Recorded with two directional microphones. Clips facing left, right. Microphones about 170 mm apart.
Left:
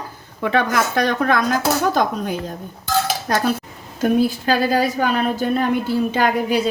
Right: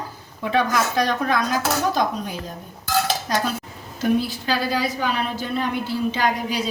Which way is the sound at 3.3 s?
55° left (ahead or behind).